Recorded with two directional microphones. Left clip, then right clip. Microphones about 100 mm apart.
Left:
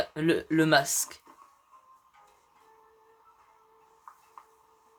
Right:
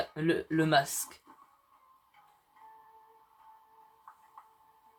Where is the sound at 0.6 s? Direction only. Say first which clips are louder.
Left 3 dB; 90° left.